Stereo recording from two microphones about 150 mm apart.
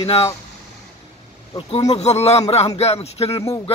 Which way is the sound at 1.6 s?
35° left (ahead or behind).